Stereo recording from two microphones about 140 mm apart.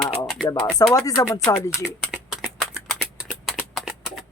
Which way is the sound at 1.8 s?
5° right (ahead or behind).